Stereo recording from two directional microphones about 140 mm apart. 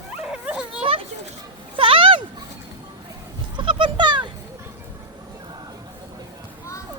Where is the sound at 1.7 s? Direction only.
40° right (ahead or behind).